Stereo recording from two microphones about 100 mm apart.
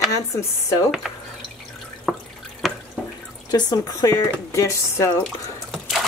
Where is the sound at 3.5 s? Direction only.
40° left (ahead or behind).